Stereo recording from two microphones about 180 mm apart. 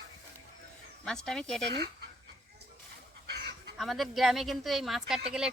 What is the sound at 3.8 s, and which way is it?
A woman's voice, centre (ahead or behind).